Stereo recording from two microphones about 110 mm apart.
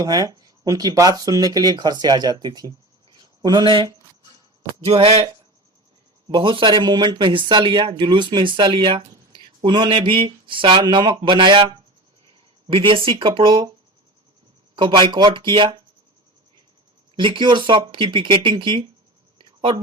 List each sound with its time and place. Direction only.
0.0 s speech: 30° right (ahead or behind)
4.9 s speech: 60° right (ahead or behind)
6.2 s speech: 45° right (ahead or behind)
12.6 s speech: 50° right (ahead or behind)
14.8 s speech: 50° right (ahead or behind)
17.2 s speech: 50° right (ahead or behind)